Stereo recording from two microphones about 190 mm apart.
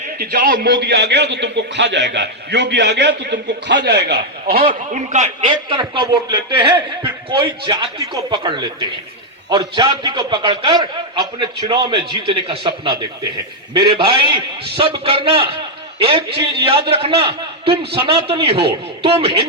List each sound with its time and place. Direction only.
0.3 s a man's voice: 50° right (ahead or behind)
0.5 s a man's voice: 60° right (ahead or behind)
4.7 s a man's voice: 40° right (ahead or behind)
5.5 s a man's voice: 25° right (ahead or behind)